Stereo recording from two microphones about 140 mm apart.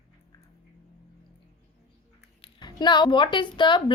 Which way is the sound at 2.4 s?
30° left (ahead or behind).